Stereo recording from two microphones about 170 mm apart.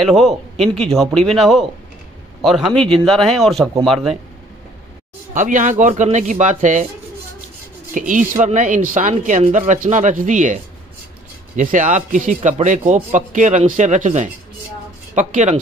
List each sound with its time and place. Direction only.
0.0 s speech: centre (ahead or behind)
5.3 s speech: 50° right (ahead or behind)
8.1 s speech: 50° right (ahead or behind)